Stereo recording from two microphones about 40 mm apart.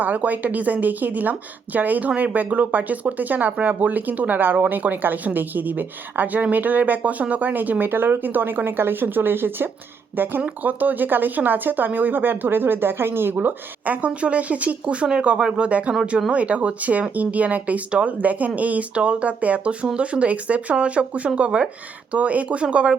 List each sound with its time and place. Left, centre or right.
0.0 s a woman's voice: right
7.9 s speech: right
10.6 s a woman's voice: right
13.3 s speech: right